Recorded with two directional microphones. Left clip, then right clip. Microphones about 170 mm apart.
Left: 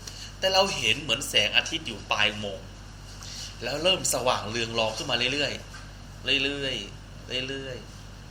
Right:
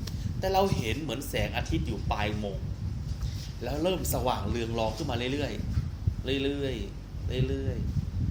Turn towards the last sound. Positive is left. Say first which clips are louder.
# left 3 dB
turn(degrees=-55)  # may be behind; listen again after turning